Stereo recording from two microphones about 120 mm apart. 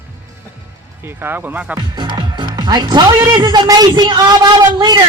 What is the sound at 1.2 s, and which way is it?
Speech, 15° right (ahead or behind).